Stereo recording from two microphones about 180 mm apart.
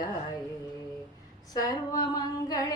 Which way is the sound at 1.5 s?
20° left (ahead or behind).